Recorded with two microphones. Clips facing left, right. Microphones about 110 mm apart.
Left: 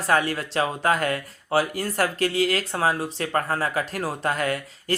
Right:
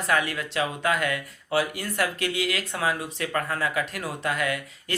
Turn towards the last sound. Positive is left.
turn(degrees=35)  # may be behind; listen again after turning